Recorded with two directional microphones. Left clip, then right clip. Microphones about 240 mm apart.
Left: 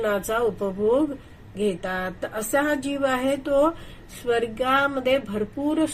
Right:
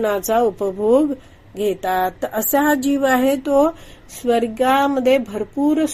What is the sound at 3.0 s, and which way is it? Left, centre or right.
A woman's voice, right.